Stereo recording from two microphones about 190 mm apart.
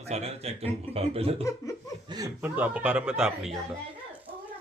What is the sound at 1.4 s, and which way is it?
Speech, 15° left (ahead or behind).